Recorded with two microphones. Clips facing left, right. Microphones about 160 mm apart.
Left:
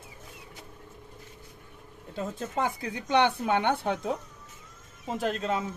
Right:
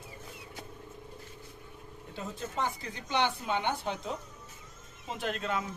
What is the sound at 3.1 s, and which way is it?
Speech, 60° left (ahead or behind).